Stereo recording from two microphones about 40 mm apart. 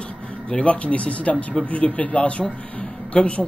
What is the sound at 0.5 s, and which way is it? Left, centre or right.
A man's voice, left.